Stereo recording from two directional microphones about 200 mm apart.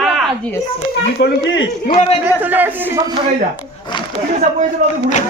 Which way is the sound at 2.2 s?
10° right (ahead or behind).